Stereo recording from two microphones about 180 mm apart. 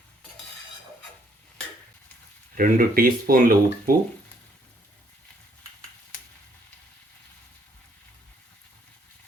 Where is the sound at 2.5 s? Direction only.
50° right (ahead or behind).